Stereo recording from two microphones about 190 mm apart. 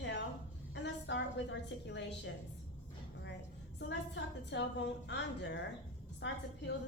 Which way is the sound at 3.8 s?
65° left (ahead or behind).